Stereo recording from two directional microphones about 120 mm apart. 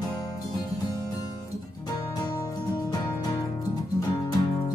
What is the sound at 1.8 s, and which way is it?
Music, 35° left (ahead or behind).